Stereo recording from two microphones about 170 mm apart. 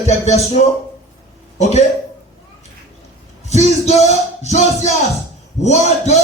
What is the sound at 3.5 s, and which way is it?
Speech, 40° left (ahead or behind).